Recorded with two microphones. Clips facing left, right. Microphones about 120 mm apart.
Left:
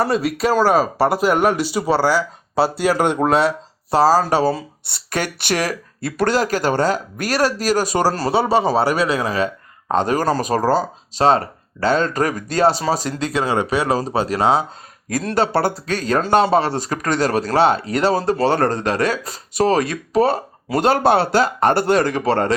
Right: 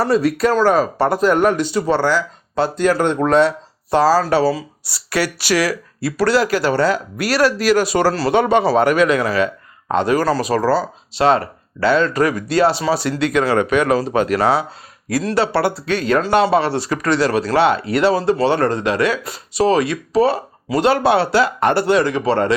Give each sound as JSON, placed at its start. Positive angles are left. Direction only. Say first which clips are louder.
{"t": 0.0, "sound": "speech", "louder": "right 3 dB", "side_deg": 0}
{"t": 3.9, "sound": "speech", "louder": "right 1 dB", "side_deg": 40}
{"t": 8.3, "sound": "speech", "louder": "right 3 dB", "side_deg": 35}
{"t": 15.1, "sound": "speech", "louder": "right 1 dB", "side_deg": 45}